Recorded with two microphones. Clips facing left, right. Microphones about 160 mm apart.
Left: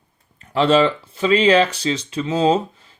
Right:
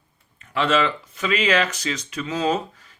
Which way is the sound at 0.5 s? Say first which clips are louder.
Left 6 dB; 35° left (ahead or behind).